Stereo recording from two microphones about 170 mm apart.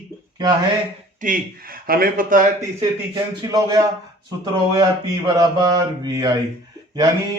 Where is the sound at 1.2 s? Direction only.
55° right (ahead or behind).